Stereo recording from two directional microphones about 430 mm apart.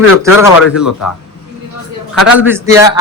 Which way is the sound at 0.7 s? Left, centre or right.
Centre.